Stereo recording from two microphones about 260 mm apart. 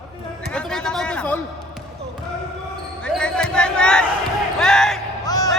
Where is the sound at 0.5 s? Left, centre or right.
Centre.